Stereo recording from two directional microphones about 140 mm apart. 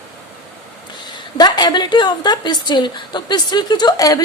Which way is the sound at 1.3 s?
30° left (ahead or behind).